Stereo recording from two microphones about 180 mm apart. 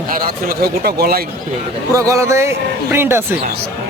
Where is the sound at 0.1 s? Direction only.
55° right (ahead or behind).